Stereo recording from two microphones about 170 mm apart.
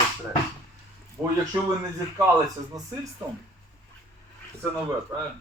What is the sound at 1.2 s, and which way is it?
Speech, 15° right (ahead or behind).